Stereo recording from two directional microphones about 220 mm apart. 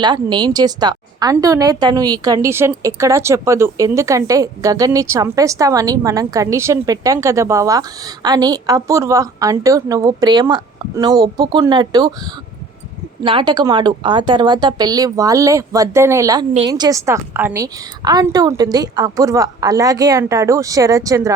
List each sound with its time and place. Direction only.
0.0 s a woman's voice: 20° right (ahead or behind)
13.2 s a woman's voice: 20° right (ahead or behind)